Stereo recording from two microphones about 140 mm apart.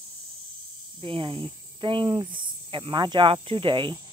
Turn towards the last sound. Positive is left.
turn(degrees=-35)  # may be behind; listen again after turning